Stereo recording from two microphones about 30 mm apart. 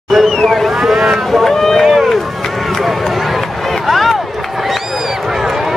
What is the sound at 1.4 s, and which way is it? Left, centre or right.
Run, centre.